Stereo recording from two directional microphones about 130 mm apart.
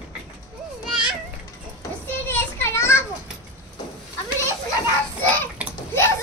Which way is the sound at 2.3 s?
15° left (ahead or behind).